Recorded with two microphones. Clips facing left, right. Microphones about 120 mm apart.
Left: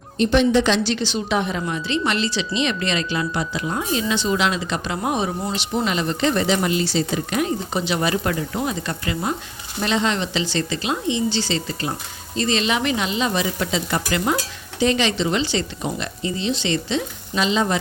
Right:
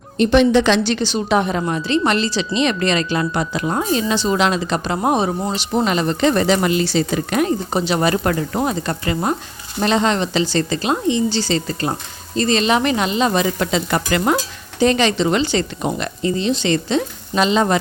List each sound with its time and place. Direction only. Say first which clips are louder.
0.2 s speech: right 4 dB; 70° right (ahead or behind)
14.8 s speech: right 4 dB; 45° right (ahead or behind)